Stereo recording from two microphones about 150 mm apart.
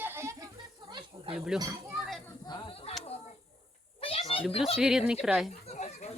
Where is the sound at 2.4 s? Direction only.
30° left (ahead or behind).